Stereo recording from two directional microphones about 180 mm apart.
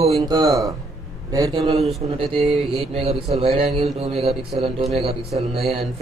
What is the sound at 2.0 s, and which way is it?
Speech, 35° right (ahead or behind).